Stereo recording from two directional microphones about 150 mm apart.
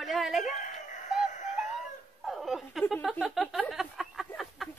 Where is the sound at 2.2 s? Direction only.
Centre (ahead or behind).